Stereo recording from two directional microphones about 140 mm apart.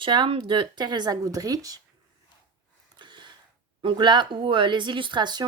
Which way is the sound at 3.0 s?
35° right (ahead or behind).